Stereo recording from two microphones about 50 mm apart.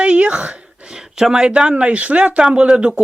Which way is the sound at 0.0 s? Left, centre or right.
Right.